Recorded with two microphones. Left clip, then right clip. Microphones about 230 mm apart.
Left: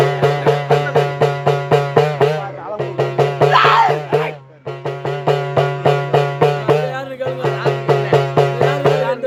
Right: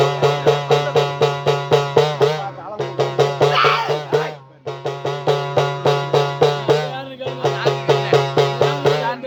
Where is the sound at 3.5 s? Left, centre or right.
Centre.